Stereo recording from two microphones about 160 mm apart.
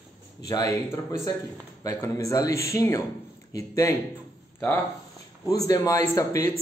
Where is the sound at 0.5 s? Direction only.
20° left (ahead or behind).